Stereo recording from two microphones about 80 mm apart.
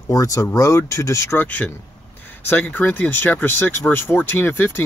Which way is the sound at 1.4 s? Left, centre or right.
Centre.